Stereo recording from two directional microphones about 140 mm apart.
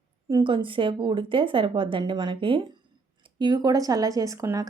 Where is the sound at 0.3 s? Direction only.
35° right (ahead or behind).